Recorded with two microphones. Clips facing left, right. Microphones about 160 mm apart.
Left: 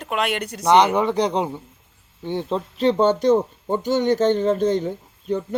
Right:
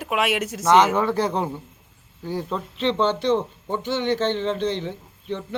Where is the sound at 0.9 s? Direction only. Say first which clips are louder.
Left 2 dB; 15° left (ahead or behind).